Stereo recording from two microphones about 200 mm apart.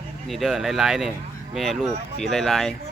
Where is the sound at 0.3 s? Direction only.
Centre (ahead or behind).